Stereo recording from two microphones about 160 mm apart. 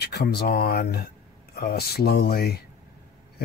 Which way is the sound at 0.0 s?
90° left.